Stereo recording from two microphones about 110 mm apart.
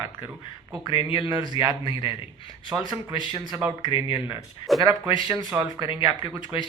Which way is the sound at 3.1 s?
45° left (ahead or behind).